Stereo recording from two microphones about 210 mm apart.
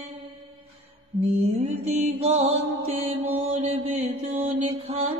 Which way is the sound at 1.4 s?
30° right (ahead or behind).